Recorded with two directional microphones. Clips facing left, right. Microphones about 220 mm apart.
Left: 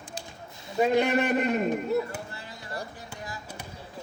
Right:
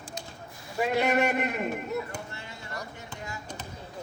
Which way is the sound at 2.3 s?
35° left (ahead or behind).